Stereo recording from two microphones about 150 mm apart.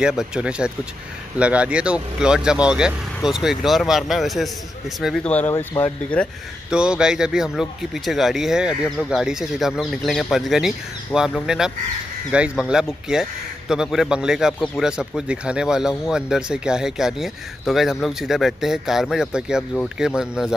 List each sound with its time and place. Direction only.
0.0 s a man's voice: 5° right (ahead or behind)
6.7 s a man's voice: 5° right (ahead or behind)